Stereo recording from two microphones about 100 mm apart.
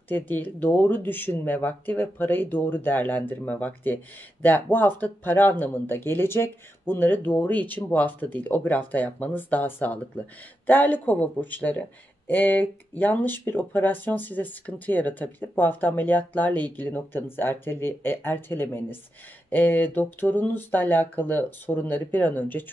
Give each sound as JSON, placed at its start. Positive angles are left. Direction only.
{"t": 0.1, "sound": "speech", "side_deg": 20}